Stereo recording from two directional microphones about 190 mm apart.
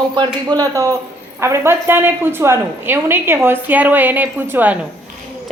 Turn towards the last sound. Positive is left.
turn(degrees=-10)  # may be behind; listen again after turning